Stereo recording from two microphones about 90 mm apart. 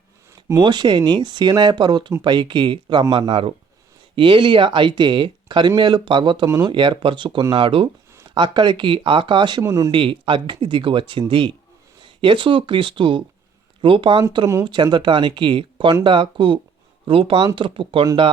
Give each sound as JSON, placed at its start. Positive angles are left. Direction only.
{"t": 0.6, "sound": "speech", "side_deg": -60}
{"t": 8.4, "sound": "speech", "side_deg": -60}
{"t": 9.6, "sound": "speech", "side_deg": -35}
{"t": 9.9, "sound": "speech", "side_deg": -70}
{"t": 14.6, "sound": "speech", "side_deg": -60}
{"t": 17.1, "sound": "speech", "side_deg": -85}
{"t": 17.4, "sound": "speech", "side_deg": -65}